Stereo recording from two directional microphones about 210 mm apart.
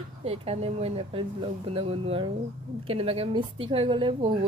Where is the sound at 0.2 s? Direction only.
30° right (ahead or behind).